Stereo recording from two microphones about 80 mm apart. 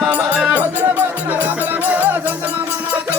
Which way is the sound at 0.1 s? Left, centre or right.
Centre.